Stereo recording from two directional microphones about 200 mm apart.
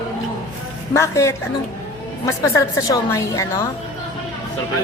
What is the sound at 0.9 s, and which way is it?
A woman's voice, 15° left (ahead or behind).